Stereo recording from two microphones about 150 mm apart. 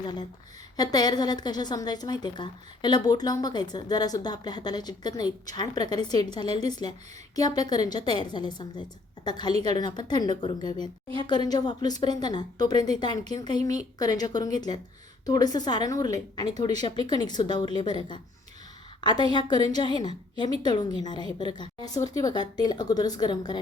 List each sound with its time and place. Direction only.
0.0 s a woman's voice: 30° left (ahead or behind)